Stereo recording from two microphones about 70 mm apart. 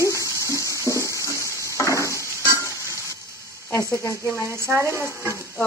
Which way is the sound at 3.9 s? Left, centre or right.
Left.